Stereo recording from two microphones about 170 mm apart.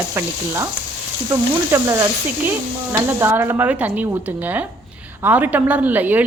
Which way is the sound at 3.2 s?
15° right (ahead or behind).